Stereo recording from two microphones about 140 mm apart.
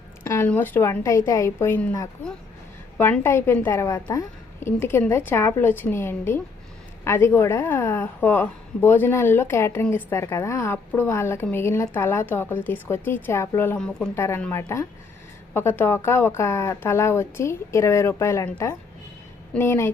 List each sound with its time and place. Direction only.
0.3 s a woman's voice: 15° left (ahead or behind)
3.0 s a woman's voice: 15° left (ahead or behind)
14.2 s a woman's voice: 20° left (ahead or behind)